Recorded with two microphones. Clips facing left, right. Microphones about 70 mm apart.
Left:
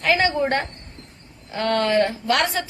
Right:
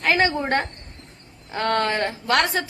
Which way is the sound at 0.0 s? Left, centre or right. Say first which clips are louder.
Left 1 dB; right.